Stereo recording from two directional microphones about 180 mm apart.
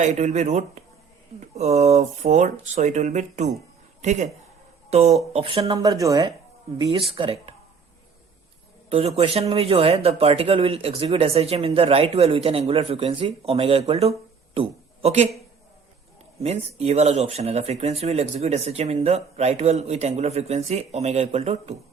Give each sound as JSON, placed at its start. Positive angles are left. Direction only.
{"t": 0.0, "sound": "speech", "side_deg": -40}
{"t": 8.9, "sound": "speech", "side_deg": -35}
{"t": 16.4, "sound": "speech", "side_deg": -35}